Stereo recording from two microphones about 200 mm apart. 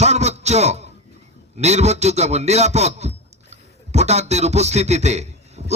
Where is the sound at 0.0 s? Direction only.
35° right (ahead or behind).